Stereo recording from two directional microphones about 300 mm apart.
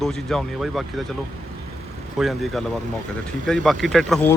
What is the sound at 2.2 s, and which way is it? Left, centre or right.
Speech, centre.